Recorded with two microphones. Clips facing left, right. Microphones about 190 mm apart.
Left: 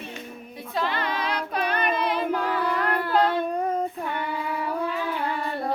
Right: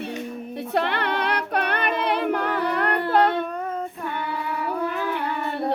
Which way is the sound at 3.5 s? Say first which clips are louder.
Left 3 dB; 35° left (ahead or behind).